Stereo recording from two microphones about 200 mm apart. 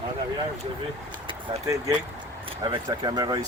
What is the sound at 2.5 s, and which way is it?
Speech, 25° right (ahead or behind).